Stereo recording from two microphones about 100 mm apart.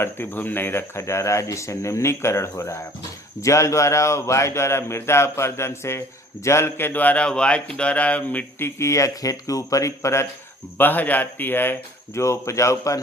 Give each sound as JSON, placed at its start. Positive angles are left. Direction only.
{"t": 0.0, "sound": "speech", "side_deg": 20}
{"t": 10.8, "sound": "speech", "side_deg": 20}